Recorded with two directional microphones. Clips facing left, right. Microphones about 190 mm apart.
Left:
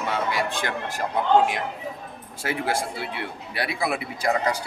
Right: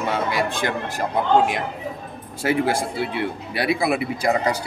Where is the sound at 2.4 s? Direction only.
15° right (ahead or behind).